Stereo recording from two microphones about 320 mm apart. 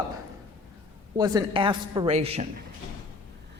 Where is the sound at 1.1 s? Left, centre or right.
Centre.